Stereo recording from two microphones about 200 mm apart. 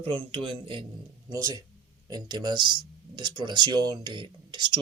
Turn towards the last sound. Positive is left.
turn(degrees=-25)  # may be behind; listen again after turning